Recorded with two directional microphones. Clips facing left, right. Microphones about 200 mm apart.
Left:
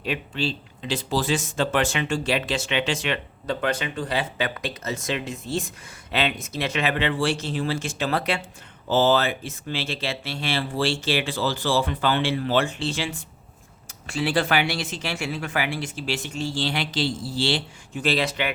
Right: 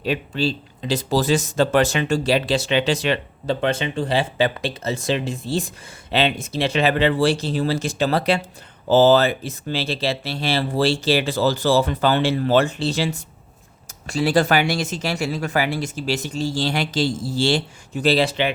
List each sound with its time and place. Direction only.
0.0 s speech: 35° right (ahead or behind)